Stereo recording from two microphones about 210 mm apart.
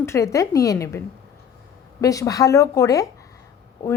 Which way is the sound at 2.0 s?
15° left (ahead or behind).